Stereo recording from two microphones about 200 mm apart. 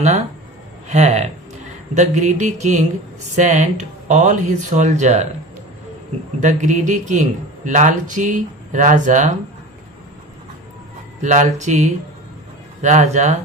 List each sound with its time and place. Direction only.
0.9 s a man's voice: 35° right (ahead or behind)
6.4 s a man's voice: 35° right (ahead or behind)
11.2 s a man's voice: 35° right (ahead or behind)